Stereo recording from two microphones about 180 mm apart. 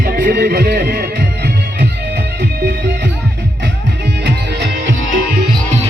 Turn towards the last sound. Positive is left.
turn(degrees=-80)